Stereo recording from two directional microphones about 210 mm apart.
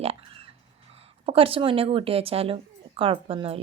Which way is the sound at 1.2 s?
25° right (ahead or behind).